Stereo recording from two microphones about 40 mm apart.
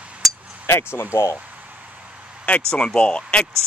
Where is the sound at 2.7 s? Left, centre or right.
Left.